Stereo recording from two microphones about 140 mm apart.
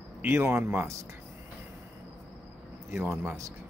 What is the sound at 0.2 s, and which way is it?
Speech, 15° right (ahead or behind).